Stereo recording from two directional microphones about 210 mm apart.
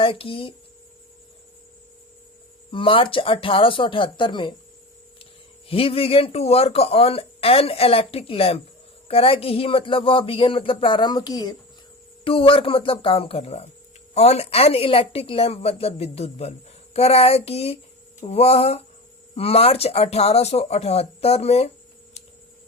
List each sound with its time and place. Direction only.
0.0 s speech: 25° left (ahead or behind)
2.7 s speech: 25° left (ahead or behind)